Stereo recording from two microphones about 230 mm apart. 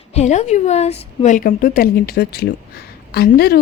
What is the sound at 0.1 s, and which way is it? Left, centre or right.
A woman's voice, left.